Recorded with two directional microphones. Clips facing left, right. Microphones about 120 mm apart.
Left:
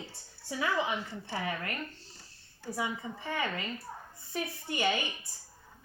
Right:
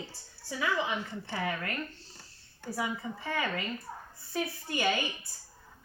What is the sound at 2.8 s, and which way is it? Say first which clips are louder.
A woman's voice: right 1 dB; 25° left (ahead or behind).